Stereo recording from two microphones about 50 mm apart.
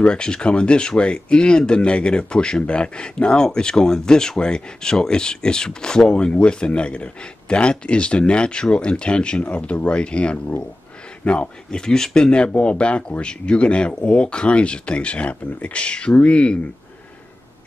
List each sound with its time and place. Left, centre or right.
0.0 s speech: centre